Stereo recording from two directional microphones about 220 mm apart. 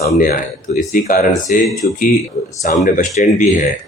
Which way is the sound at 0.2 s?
35° left (ahead or behind).